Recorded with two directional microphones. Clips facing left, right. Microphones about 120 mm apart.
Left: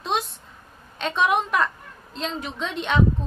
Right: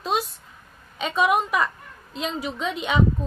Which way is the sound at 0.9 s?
5° right (ahead or behind).